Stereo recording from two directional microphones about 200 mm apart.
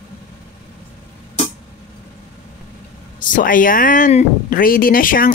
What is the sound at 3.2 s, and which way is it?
Speech, 40° left (ahead or behind).